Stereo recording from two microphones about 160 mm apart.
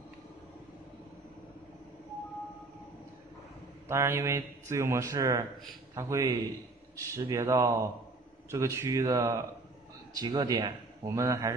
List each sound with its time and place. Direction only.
3.9 s a man's voice: 15° right (ahead or behind)